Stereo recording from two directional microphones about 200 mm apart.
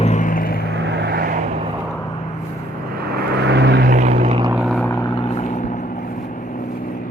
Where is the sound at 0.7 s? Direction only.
60° right (ahead or behind); by 1.5 s 40° right (ahead or behind).